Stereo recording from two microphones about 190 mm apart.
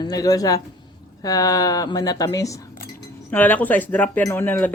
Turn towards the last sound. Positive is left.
turn(degrees=10)  # may be behind; listen again after turning